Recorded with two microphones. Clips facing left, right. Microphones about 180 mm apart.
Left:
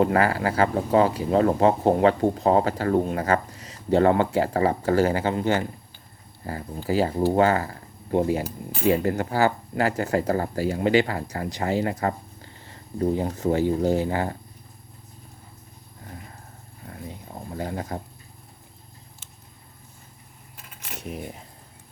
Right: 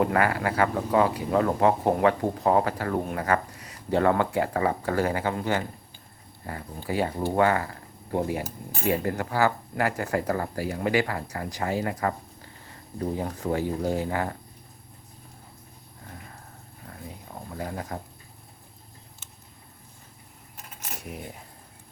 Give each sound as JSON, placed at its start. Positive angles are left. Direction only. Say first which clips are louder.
{"t": 0.0, "sound": "speech", "louder": "left 3 dB", "side_deg": 30}
{"t": 6.8, "sound": "speech", "louder": "left 5 dB", "side_deg": 30}
{"t": 17.1, "sound": "a sound", "louder": "left 3 dB", "side_deg": 30}